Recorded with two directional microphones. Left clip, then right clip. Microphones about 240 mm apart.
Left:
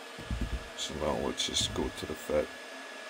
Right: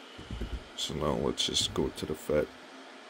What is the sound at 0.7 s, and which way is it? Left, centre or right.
Speech, right.